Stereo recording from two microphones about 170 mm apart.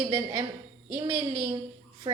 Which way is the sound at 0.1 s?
25° right (ahead or behind).